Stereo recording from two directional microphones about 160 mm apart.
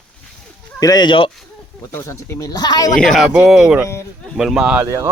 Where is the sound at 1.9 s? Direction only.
15° left (ahead or behind).